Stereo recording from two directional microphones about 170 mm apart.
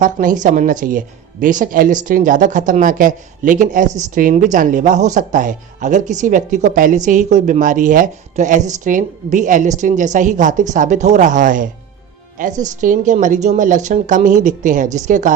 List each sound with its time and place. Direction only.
0.0 s speech: 50° right (ahead or behind)